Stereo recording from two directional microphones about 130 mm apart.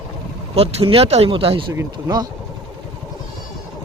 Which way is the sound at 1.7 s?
30° right (ahead or behind).